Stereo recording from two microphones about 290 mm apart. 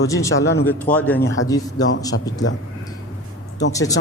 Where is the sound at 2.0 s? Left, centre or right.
Centre.